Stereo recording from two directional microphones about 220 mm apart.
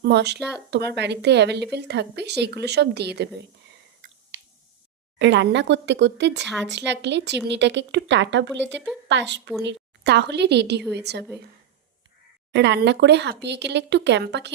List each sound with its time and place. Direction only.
0.0 s speech: 50° right (ahead or behind)
0.3 s speech: centre (ahead or behind)
0.7 s speech: 50° right (ahead or behind)
5.2 s a woman's voice: 55° right (ahead or behind)
12.5 s speech: 50° right (ahead or behind)